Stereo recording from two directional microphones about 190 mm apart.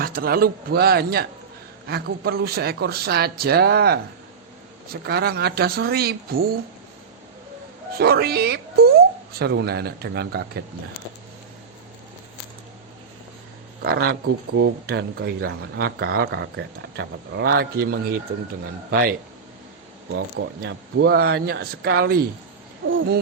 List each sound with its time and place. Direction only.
0.0 s a man's voice: 50° right (ahead or behind)
7.9 s speech: 55° right (ahead or behind)
13.8 s a man's voice: 55° right (ahead or behind)
20.1 s speech: 70° right (ahead or behind)